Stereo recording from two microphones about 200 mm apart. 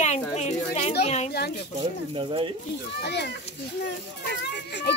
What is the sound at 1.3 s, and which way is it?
Speech, 55° left (ahead or behind).